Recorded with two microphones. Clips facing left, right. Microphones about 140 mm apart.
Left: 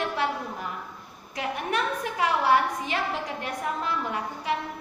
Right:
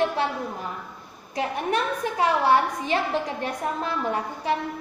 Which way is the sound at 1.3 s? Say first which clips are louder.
Right 4 dB; 30° right (ahead or behind).